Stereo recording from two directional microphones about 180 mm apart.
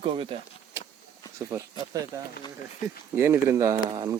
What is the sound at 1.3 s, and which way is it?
Speech, 15° right (ahead or behind).